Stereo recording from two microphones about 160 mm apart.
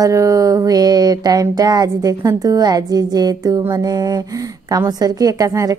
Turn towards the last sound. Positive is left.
turn(degrees=-20)  # may be behind; listen again after turning